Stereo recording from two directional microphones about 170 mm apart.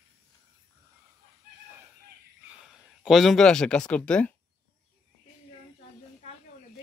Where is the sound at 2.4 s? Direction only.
5° right (ahead or behind).